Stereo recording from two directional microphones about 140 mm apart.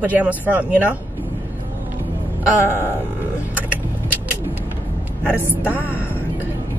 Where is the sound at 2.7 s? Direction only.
15° left (ahead or behind).